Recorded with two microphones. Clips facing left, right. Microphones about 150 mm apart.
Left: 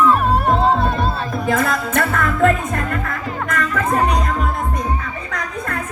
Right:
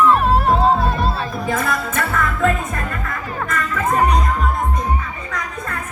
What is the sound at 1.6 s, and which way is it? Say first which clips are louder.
Music: left 3 dB; 60° left (ahead or behind).